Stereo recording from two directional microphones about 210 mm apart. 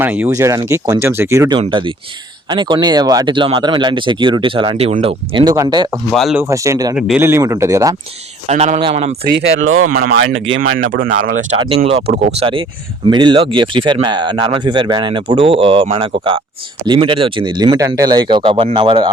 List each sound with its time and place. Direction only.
0.0 s speech: 10° right (ahead or behind)
6.1 s speech: centre (ahead or behind)
6.4 s speech: 15° right (ahead or behind)
8.4 s a man's voice: 30° right (ahead or behind)
9.2 s speech: 50° right (ahead or behind)
12.1 s speech: 30° right (ahead or behind)